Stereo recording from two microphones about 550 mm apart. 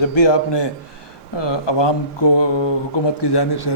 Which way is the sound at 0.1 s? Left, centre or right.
Left.